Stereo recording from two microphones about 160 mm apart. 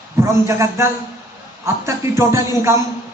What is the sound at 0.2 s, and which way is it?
A man's voice, 15° right (ahead or behind).